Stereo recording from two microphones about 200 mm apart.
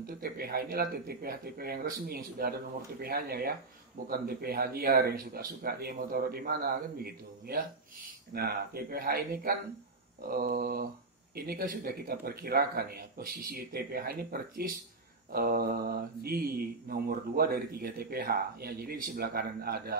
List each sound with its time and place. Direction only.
0.0 s speech: 50° right (ahead or behind)